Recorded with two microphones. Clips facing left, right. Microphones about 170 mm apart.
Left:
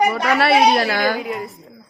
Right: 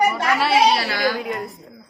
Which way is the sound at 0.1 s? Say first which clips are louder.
Left 3 dB; 65° left (ahead or behind).